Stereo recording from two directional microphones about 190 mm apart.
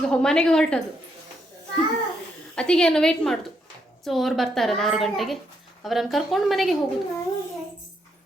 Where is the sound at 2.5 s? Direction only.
5° left (ahead or behind).